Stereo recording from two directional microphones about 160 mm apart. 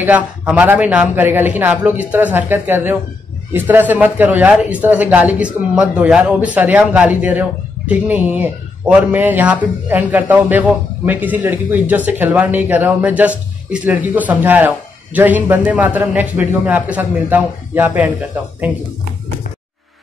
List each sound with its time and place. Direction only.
0.0 s speech: 10° right (ahead or behind)